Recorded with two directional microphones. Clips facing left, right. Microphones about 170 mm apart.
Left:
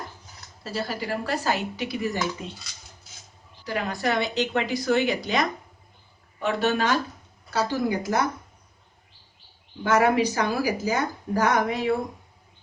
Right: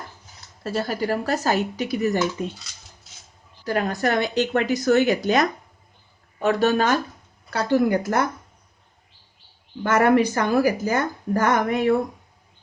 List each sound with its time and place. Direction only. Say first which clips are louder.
0.6 s a woman's voice: right 5 dB; 50° right (ahead or behind)
3.7 s a woman's voice: right 4 dB; 45° right (ahead or behind)
7.5 s a woman's voice: right 5 dB; 55° right (ahead or behind)
9.8 s a woman's voice: right 3 dB; 55° right (ahead or behind)